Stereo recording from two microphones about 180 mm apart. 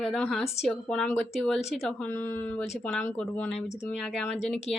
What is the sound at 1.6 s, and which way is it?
Speech, 35° left (ahead or behind).